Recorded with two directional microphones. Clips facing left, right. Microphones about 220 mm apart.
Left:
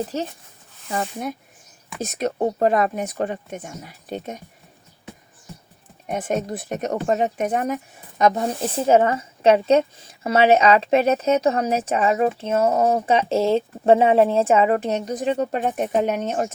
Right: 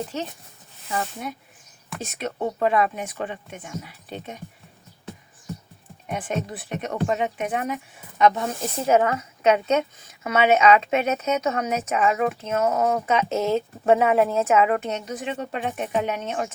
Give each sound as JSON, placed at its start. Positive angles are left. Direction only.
{"t": 0.9, "sound": "speech", "side_deg": 40}
{"t": 6.1, "sound": "speech", "side_deg": 45}